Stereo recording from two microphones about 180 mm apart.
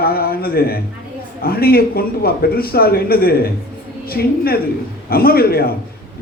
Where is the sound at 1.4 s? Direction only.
55° left (ahead or behind).